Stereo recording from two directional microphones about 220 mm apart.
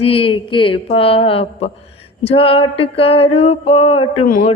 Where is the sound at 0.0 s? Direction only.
25° left (ahead or behind).